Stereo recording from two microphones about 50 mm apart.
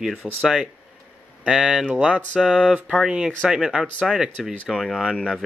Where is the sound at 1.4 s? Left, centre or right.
Centre.